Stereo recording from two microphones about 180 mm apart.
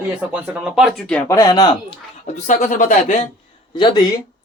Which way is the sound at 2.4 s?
45° left (ahead or behind).